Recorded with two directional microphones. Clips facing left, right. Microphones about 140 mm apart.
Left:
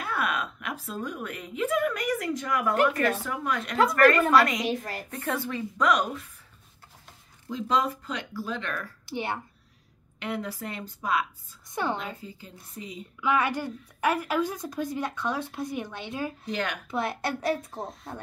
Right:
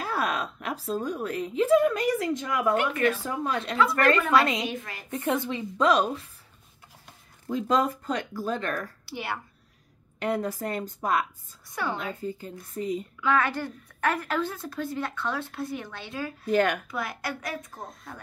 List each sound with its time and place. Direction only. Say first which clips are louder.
0.0 s a woman's voice: right 1 dB; 35° right (ahead or behind)
2.7 s speech: left 1 dB; 40° left (ahead or behind)
3.3 s speech: right 1 dB; 30° right (ahead or behind)
4.6 s speech: left 4 dB; 35° left (ahead or behind)
5.2 s speech: right 3 dB; 20° right (ahead or behind)
7.4 s speech: right 2 dB; 45° right (ahead or behind)
9.0 s speech: left 2 dB; 20° left (ahead or behind)
10.1 s speech: right 5 dB; 45° right (ahead or behind)
11.7 s a woman's voice: left 2 dB; 20° left (ahead or behind)
12.0 s speech: right 5 dB; 50° right (ahead or behind)
13.2 s a woman's voice: left 1 dB; 15° left (ahead or behind)
16.4 s speech: right 13 dB; 50° right (ahead or behind)
16.9 s a woman's voice: left 3 dB; 30° left (ahead or behind)